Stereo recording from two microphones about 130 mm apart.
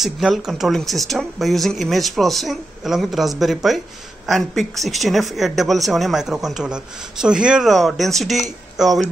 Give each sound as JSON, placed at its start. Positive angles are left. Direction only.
{"t": 0.0, "sound": "speech", "side_deg": 0}